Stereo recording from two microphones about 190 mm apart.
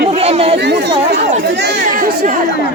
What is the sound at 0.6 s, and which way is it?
Chatter, 65° right (ahead or behind).